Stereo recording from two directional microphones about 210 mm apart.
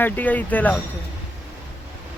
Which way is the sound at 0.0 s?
10° left (ahead or behind).